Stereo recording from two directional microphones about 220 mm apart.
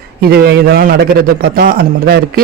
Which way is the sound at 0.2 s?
45° right (ahead or behind).